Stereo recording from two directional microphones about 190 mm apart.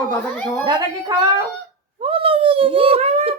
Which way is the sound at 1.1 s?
20° right (ahead or behind).